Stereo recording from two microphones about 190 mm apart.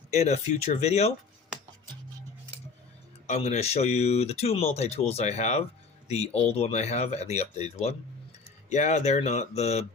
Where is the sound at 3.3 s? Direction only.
35° left (ahead or behind).